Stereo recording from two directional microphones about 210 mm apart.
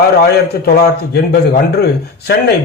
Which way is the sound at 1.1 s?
50° left (ahead or behind).